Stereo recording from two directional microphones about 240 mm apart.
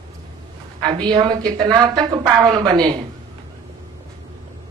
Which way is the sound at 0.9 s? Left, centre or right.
Centre.